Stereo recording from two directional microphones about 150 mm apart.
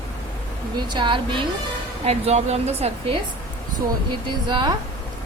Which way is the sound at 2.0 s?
45° right (ahead or behind).